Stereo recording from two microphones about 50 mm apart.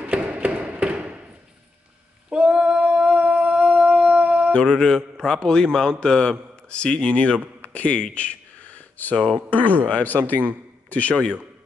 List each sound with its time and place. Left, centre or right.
0.0 s a sound: right
2.2 s singing: right
4.6 s a man's voice: centre
7.6 s a sound: left
9.1 s speech: centre
9.8 s a man's voice: left